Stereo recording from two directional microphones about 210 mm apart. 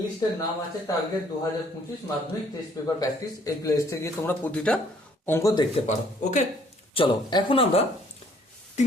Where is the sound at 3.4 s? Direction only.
15° left (ahead or behind).